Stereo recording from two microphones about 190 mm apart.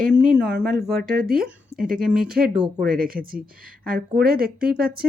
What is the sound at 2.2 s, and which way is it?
Speech, 55° right (ahead or behind).